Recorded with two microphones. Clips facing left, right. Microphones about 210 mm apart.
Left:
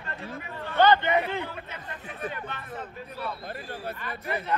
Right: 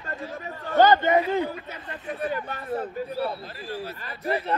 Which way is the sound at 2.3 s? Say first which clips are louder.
Right 8 dB; 35° right (ahead or behind).